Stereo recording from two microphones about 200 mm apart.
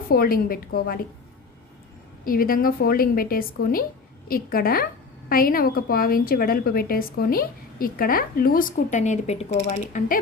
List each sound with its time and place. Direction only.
0.1 s a woman's voice: 50° left (ahead or behind)
2.2 s a woman's voice: 45° left (ahead or behind)